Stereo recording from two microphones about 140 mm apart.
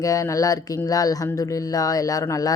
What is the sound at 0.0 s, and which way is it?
Speech, 25° left (ahead or behind).